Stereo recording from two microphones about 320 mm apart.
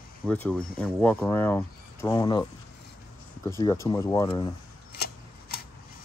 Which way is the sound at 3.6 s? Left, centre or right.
Centre.